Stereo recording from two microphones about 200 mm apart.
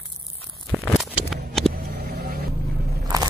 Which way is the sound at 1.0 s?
Centre (ahead or behind).